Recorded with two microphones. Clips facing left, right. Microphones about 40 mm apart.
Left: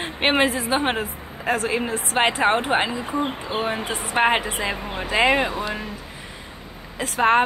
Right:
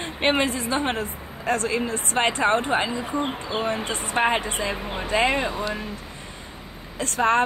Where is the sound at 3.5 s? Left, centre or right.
Left.